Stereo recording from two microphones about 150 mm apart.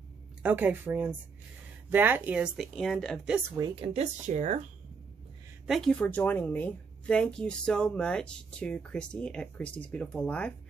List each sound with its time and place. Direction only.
0.4 s speech: 10° right (ahead or behind)
3.5 s speech: 30° right (ahead or behind); by 4.6 s 50° right (ahead or behind)
5.7 s speech: 5° left (ahead or behind)